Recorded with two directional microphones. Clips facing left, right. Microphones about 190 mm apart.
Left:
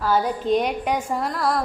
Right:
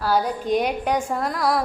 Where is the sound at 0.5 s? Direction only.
5° right (ahead or behind).